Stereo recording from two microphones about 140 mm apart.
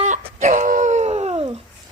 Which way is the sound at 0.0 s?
60° right (ahead or behind).